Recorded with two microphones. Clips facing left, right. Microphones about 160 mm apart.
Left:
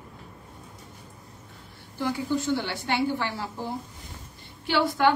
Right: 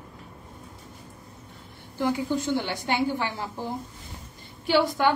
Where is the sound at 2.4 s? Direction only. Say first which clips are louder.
Right 1 dB; 15° right (ahead or behind).